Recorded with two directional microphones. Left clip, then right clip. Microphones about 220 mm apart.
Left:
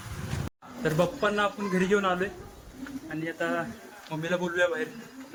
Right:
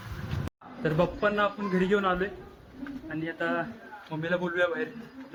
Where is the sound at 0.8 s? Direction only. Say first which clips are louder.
Left 1 dB; 15° right (ahead or behind).